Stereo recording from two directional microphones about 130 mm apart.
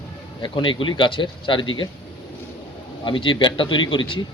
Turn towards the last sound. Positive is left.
turn(degrees=40)  # may be behind; listen again after turning